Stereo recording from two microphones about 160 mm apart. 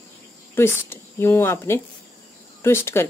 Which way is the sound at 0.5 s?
15° left (ahead or behind).